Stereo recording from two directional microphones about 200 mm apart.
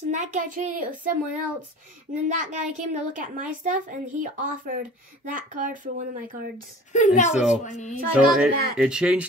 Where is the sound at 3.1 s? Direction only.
40° right (ahead or behind).